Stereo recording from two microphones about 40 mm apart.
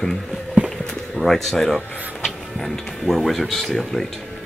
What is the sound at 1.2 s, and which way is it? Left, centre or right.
Speech, centre.